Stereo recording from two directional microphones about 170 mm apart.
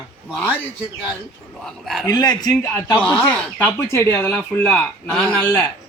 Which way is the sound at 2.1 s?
20° left (ahead or behind).